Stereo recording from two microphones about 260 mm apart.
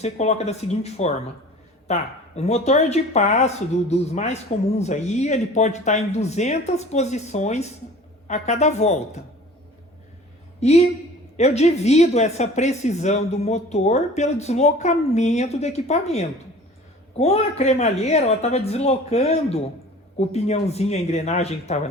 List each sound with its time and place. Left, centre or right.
0.0 s speech: left
10.6 s speech: left